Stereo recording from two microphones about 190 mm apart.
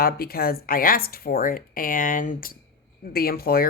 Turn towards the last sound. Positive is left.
turn(degrees=50)  # may be behind; listen again after turning